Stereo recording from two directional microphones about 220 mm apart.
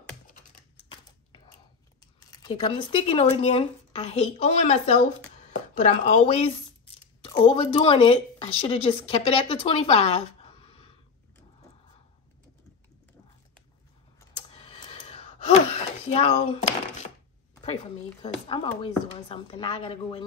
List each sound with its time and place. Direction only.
2.3 s speech: 20° left (ahead or behind)
5.5 s chopping: 35° left (ahead or behind)
7.2 s speech: 20° left (ahead or behind)
14.5 s gasp: 25° left (ahead or behind)
16.1 s speech: 30° left (ahead or behind)
17.6 s speech: 25° left (ahead or behind)